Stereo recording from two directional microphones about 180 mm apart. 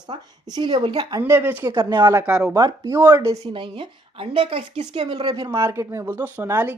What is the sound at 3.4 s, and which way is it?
A woman's voice, 30° right (ahead or behind).